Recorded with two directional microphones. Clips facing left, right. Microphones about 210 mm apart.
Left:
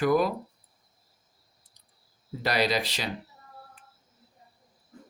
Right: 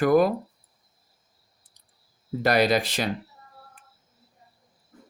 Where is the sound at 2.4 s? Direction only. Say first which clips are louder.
Right 5 dB; 50° right (ahead or behind).